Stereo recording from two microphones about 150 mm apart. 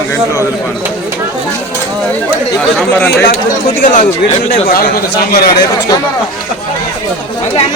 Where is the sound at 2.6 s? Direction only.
10° left (ahead or behind).